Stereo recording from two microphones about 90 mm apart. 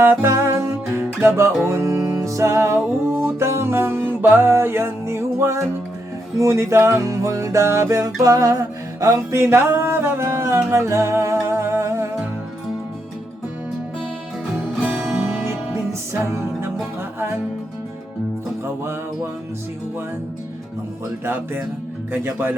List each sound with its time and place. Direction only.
0.0 s music: 25° right (ahead or behind)
15.0 s music: 10° right (ahead or behind)
15.4 s music: 30° right (ahead or behind)
21.2 s speech: 25° right (ahead or behind)